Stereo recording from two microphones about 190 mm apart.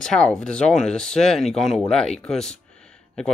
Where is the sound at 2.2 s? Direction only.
5° left (ahead or behind).